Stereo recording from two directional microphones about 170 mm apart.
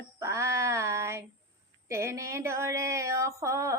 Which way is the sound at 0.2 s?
15° right (ahead or behind).